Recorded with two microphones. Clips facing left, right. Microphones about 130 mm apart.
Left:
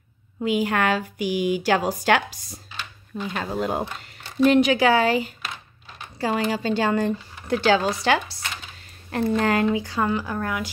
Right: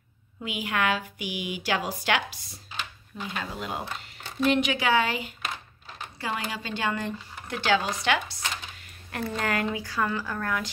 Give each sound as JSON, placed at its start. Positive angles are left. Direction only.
{"t": 0.4, "sound": "a woman's voice", "side_deg": 40}